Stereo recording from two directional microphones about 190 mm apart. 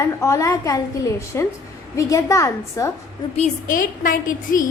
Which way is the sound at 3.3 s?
45° left (ahead or behind).